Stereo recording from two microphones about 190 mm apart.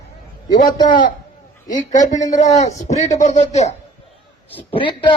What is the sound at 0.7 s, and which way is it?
A man's voice, 25° left (ahead or behind).